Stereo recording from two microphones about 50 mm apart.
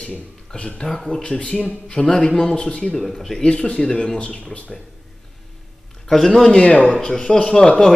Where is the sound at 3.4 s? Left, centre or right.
Centre.